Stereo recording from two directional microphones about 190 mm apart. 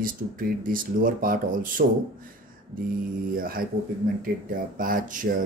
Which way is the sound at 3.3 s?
50° right (ahead or behind).